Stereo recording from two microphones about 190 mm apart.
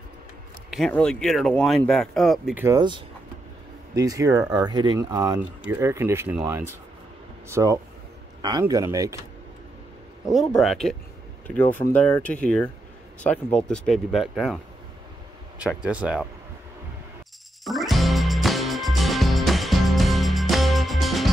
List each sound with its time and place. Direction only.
0.7 s speech: centre (ahead or behind)
2.6 s a man's voice: 20° right (ahead or behind)
10.2 s speech: centre (ahead or behind)
15.6 s speech: 5° right (ahead or behind)
17.6 s music: centre (ahead or behind)